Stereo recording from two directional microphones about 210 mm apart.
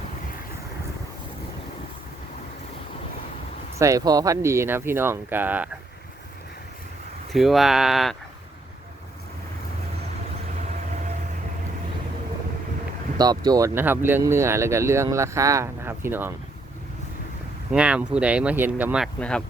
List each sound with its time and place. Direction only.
3.8 s speech: 15° right (ahead or behind)
7.3 s speech: centre (ahead or behind)
13.1 s speech: 20° right (ahead or behind)
17.7 s speech: 5° right (ahead or behind)